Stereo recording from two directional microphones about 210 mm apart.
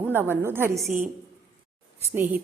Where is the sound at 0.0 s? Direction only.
10° right (ahead or behind).